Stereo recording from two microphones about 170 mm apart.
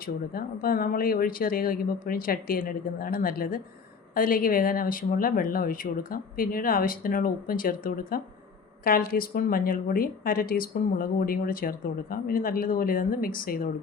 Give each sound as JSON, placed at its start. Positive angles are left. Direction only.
{"t": 0.0, "sound": "speech", "side_deg": 60}